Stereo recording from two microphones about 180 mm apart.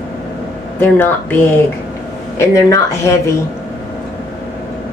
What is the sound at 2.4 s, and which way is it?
Speech, 15° left (ahead or behind).